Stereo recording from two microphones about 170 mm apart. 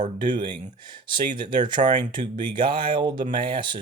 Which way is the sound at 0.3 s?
30° right (ahead or behind).